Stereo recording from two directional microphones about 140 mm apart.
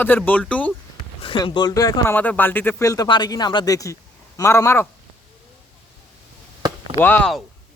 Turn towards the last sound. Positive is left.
turn(degrees=10)  # may be behind; listen again after turning